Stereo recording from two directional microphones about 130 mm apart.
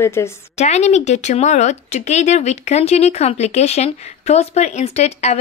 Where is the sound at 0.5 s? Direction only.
60° left (ahead or behind).